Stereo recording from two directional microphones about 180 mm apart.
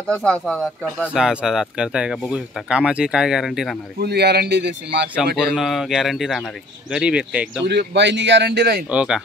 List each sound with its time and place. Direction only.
0.1 s speech: 5° left (ahead or behind)
1.0 s speech: 5° right (ahead or behind)
4.0 s a man's voice: 65° right (ahead or behind)
5.4 s speech: 5° right (ahead or behind)
7.6 s speech: 70° right (ahead or behind)
8.9 s speech: 5° right (ahead or behind)